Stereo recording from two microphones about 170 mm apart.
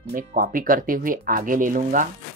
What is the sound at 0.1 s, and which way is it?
Speech, 70° right (ahead or behind).